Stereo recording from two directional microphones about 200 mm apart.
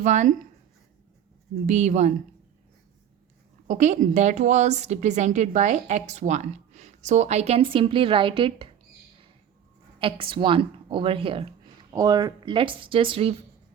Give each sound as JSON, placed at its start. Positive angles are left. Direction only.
{"t": 0.0, "sound": "a woman's voice", "side_deg": -35}
{"t": 1.6, "sound": "a woman's voice", "side_deg": -35}
{"t": 3.7, "sound": "a woman's voice", "side_deg": -35}
{"t": 10.0, "sound": "speech", "side_deg": -25}